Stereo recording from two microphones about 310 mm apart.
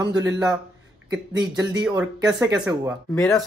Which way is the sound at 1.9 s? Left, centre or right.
Centre.